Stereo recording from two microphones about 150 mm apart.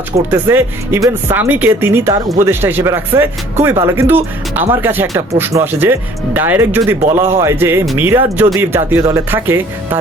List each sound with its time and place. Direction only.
0.3 s speech: 15° right (ahead or behind)